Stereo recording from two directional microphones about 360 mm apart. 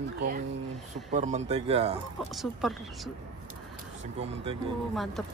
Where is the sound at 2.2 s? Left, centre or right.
Centre.